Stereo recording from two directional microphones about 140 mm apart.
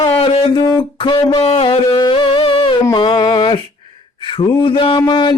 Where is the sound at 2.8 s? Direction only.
30° left (ahead or behind).